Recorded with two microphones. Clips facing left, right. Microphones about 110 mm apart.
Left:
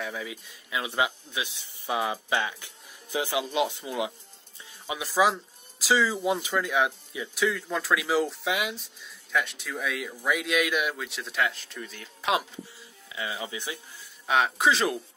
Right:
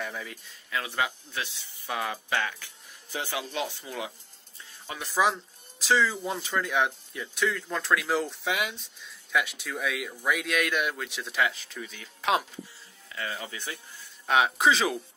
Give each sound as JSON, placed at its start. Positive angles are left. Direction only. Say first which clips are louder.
{"t": 0.0, "sound": "speech", "louder": "left 2 dB", "side_deg": 5}
{"t": 4.8, "sound": "speech", "louder": "left 2 dB", "side_deg": 5}
{"t": 13.1, "sound": "speech", "louder": "left 2 dB", "side_deg": 15}
{"t": 14.2, "sound": "speech", "louder": "right 1 dB", "side_deg": 0}